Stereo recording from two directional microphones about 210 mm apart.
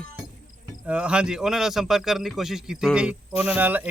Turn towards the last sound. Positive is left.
turn(degrees=-10)  # may be behind; listen again after turning